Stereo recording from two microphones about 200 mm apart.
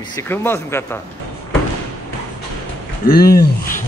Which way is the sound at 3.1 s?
50° left (ahead or behind).